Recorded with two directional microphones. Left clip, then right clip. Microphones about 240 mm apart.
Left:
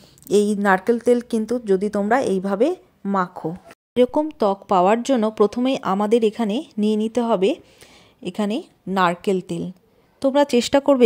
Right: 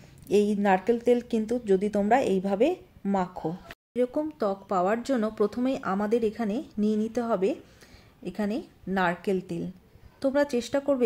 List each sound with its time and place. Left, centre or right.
0.3 s speech: left
3.4 s speech: left